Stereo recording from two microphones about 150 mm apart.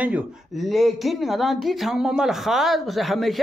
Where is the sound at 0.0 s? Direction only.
5° right (ahead or behind).